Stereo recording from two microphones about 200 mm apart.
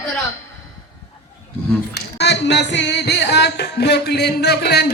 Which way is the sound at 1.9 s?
60° left (ahead or behind).